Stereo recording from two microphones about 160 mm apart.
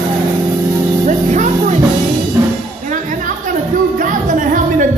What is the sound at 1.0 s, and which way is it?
Music, 50° right (ahead or behind).